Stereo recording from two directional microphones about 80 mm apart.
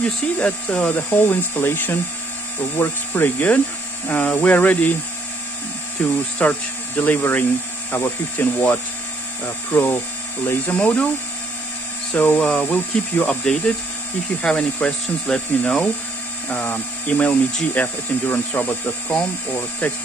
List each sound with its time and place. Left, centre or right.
0.0 s speech: centre
6.0 s speech: centre
10.8 s speech: centre
12.1 s speech: centre